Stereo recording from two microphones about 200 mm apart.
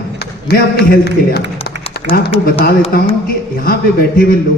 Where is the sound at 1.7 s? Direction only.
55° left (ahead or behind).